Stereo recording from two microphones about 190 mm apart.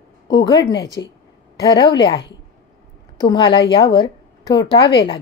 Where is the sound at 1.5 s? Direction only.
20° left (ahead or behind).